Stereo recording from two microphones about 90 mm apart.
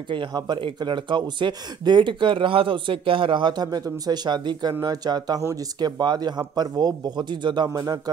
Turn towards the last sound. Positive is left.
turn(degrees=-45)  # may be behind; listen again after turning